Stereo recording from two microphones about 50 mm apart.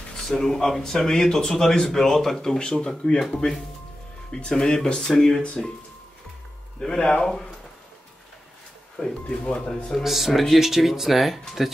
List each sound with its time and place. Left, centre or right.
0.3 s speech: centre
6.8 s speech: centre
8.9 s speech: centre
9.9 s speech: centre